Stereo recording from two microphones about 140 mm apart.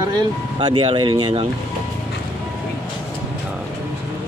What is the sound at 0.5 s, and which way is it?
Speech, 35° right (ahead or behind).